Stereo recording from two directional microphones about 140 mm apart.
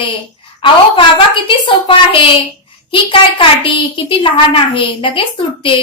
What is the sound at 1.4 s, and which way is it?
A woman's voice, 40° left (ahead or behind).